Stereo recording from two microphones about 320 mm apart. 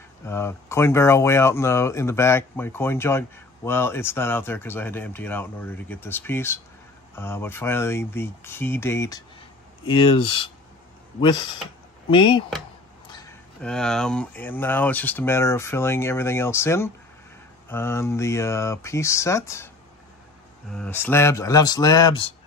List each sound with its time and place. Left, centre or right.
0.3 s speech: centre
20.7 s speech: centre